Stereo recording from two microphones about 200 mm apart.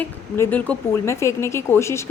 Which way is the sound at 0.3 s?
10° left (ahead or behind).